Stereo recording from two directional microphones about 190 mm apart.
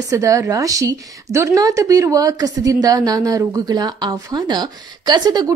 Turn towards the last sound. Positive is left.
turn(degrees=-20)  # may be behind; listen again after turning